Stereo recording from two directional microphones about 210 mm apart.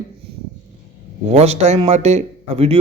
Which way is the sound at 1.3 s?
30° right (ahead or behind).